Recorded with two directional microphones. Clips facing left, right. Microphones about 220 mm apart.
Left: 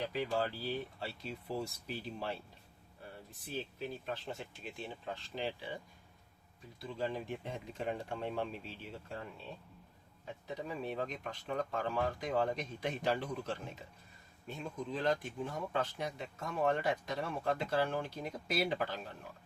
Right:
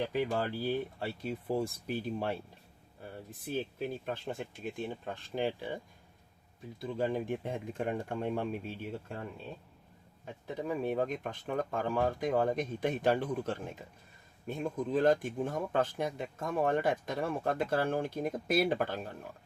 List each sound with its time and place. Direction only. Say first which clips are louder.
0.1 s speech: right 3 dB; 50° right (ahead or behind)
3.4 s speech: right 6 dB; 50° right (ahead or behind)
6.9 s speech: right 6 dB; 50° right (ahead or behind)
10.4 s speech: right 7 dB; 50° right (ahead or behind)